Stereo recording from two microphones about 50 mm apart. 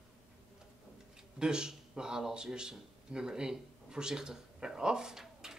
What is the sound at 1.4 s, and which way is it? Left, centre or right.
Speech, centre.